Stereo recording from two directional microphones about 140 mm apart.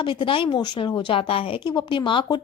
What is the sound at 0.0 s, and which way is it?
A woman's voice, 40° left (ahead or behind).